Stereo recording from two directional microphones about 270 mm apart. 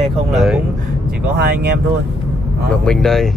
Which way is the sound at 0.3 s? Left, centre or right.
Centre.